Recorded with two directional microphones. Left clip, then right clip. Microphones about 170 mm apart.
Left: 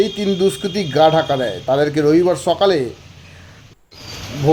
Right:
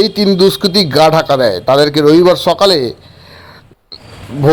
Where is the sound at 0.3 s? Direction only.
25° right (ahead or behind).